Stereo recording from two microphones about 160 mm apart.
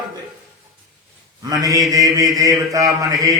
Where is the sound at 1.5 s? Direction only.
25° right (ahead or behind).